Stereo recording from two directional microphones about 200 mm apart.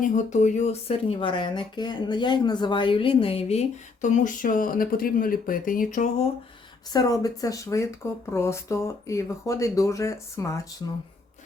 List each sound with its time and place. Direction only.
0.0 s speech: 35° left (ahead or behind)
6.9 s speech: 20° left (ahead or behind)